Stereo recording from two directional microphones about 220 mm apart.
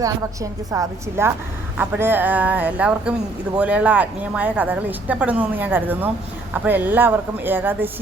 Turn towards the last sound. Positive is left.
turn(degrees=-10)  # may be behind; listen again after turning